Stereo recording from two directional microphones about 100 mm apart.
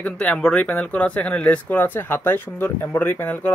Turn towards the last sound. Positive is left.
turn(degrees=20)  # may be behind; listen again after turning